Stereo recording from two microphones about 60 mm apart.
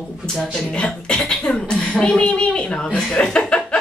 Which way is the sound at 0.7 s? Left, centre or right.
Centre.